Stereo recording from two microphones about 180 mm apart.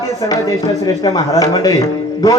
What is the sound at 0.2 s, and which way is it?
A man's voice, 20° left (ahead or behind).